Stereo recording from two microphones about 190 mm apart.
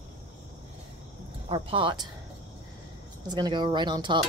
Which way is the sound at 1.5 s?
25° right (ahead or behind).